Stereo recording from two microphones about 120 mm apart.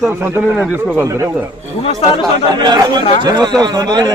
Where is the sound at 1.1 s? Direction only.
25° right (ahead or behind).